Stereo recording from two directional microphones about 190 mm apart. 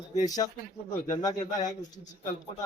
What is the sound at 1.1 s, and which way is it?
Speech, 20° left (ahead or behind).